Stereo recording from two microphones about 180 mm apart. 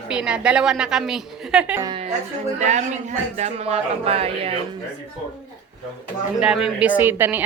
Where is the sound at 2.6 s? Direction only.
40° right (ahead or behind).